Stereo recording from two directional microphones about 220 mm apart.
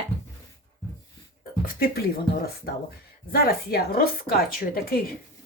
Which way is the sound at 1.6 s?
45° left (ahead or behind).